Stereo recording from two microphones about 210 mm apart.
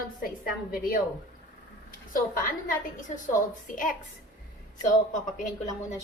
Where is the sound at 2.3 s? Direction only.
40° left (ahead or behind).